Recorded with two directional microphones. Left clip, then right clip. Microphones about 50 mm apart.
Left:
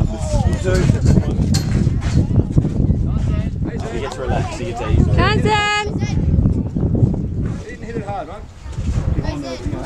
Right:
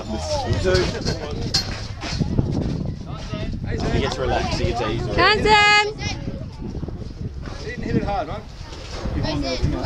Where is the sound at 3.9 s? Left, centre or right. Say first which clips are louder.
Right 2 dB; right.